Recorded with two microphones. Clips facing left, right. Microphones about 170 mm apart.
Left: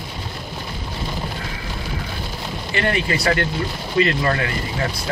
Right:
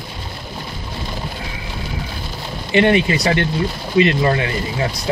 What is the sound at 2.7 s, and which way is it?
Speech, 20° right (ahead or behind).